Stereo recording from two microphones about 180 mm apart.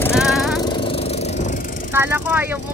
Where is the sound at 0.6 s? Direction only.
30° left (ahead or behind).